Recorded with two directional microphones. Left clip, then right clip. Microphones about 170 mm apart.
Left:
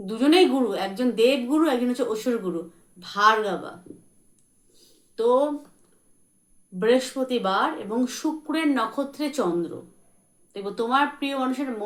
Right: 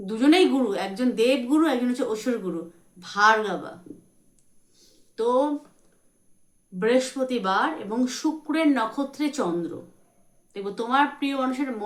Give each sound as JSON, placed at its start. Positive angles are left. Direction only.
{"t": 0.0, "sound": "speech", "side_deg": -15}
{"t": 5.1, "sound": "speech", "side_deg": -15}
{"t": 6.7, "sound": "speech", "side_deg": -15}